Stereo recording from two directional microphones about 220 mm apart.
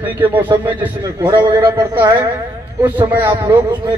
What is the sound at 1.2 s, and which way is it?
Speech, 15° right (ahead or behind).